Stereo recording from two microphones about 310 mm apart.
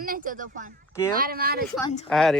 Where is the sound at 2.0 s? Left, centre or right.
Centre.